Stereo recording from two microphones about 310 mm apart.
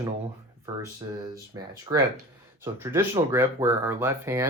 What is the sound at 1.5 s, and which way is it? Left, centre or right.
Speech, centre.